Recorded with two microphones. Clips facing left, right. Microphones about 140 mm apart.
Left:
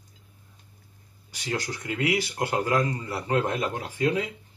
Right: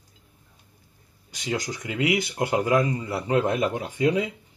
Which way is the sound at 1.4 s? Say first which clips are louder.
Right 2 dB; 20° right (ahead or behind).